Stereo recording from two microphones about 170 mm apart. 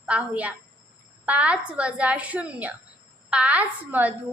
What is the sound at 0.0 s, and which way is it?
A woman's voice, 5° right (ahead or behind).